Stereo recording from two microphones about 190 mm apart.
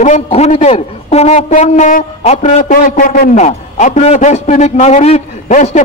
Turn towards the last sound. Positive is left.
turn(degrees=35)  # may be behind; listen again after turning